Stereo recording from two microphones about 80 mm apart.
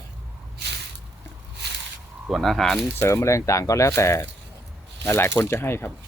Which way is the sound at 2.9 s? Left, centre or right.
Left.